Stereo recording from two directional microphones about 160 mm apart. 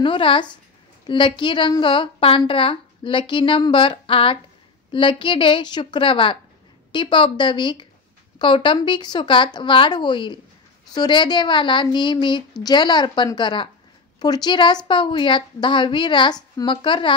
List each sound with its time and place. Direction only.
0.0 s a woman's voice: 30° left (ahead or behind)